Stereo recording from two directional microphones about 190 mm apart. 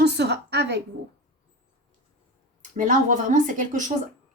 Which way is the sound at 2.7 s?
40° right (ahead or behind).